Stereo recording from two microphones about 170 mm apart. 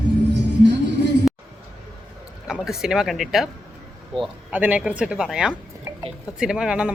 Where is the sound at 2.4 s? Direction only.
5° right (ahead or behind).